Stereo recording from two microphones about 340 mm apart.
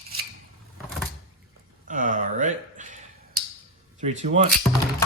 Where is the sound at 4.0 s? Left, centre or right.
Right.